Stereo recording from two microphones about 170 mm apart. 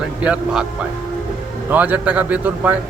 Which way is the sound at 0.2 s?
5° right (ahead or behind).